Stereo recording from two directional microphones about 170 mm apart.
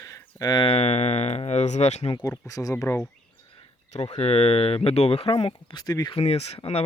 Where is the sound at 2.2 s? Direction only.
20° left (ahead or behind).